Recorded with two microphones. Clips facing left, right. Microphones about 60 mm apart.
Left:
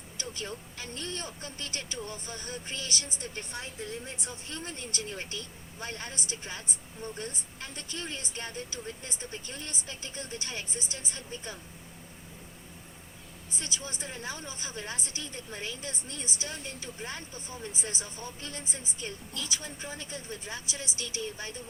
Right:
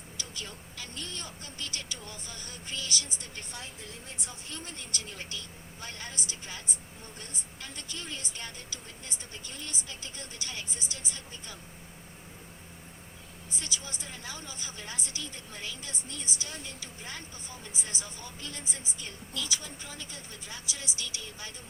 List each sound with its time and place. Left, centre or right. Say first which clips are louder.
0.2 s a woman's voice: left 5 dB; left
13.5 s a woman's voice: left 1 dB; left